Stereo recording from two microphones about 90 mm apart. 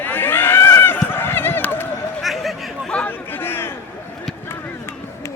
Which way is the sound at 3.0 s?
25° left (ahead or behind).